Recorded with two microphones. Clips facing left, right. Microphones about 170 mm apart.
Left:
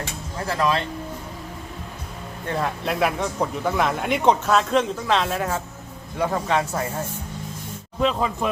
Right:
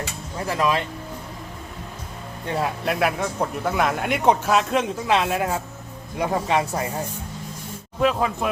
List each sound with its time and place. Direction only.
0.4 s speech: 15° right (ahead or behind)
2.6 s speech: centre (ahead or behind)
8.0 s speech: 5° right (ahead or behind)